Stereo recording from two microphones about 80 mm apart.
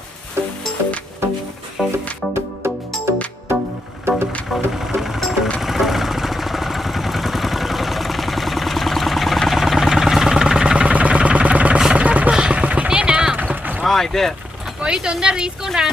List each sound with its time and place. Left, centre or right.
0.4 s music: right
1.8 s music: centre
4.1 s music: right
4.4 s music: centre
5.5 s vehicle: centre
11.8 s chopping: centre
13.8 s speech: centre
14.8 s speech: centre